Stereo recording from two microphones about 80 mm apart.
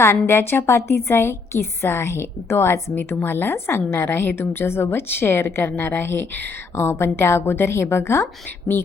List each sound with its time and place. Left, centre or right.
0.3 s a woman's voice: left